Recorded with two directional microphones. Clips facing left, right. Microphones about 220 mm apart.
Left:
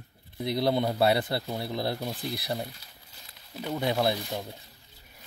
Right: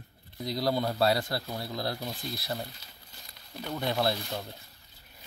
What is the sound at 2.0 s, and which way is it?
Speech, centre (ahead or behind).